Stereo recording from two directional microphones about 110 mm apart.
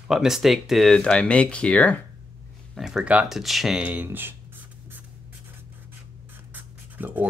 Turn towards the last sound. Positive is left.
turn(degrees=-15)  # may be behind; listen again after turning